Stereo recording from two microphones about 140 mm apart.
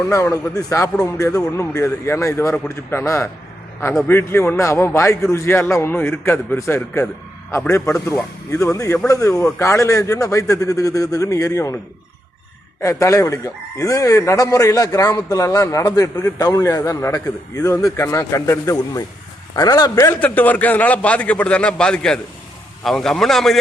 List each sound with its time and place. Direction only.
0.1 s a man's voice: 20° left (ahead or behind)
13.0 s a man's voice: 20° left (ahead or behind)
20.1 s a man's voice: 10° left (ahead or behind)